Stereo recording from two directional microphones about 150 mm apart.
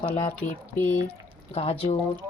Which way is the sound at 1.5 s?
45° left (ahead or behind).